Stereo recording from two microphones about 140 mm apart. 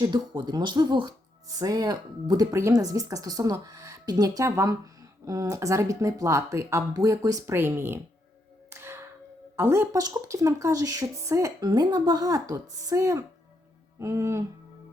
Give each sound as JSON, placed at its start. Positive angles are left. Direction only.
{"t": 0.0, "sound": "speech", "side_deg": -30}
{"t": 8.7, "sound": "whip", "side_deg": -15}
{"t": 9.6, "sound": "speech", "side_deg": -20}